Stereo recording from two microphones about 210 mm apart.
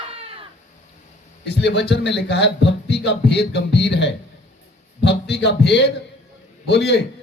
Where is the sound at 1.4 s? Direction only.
55° left (ahead or behind).